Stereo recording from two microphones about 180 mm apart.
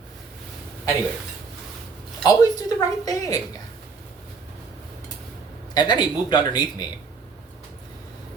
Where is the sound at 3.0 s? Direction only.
20° left (ahead or behind).